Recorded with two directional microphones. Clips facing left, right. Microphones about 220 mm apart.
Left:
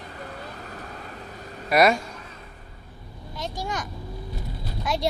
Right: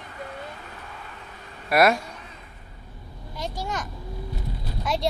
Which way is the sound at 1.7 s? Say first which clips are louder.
Even; centre (ahead or behind).